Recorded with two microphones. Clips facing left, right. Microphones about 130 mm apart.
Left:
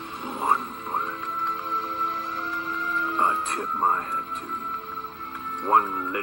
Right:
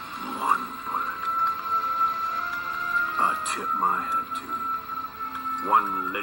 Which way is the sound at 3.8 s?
35° left (ahead or behind).